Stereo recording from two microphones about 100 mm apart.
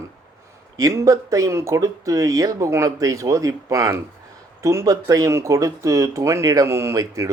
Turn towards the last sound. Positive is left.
turn(degrees=-35)  # may be behind; listen again after turning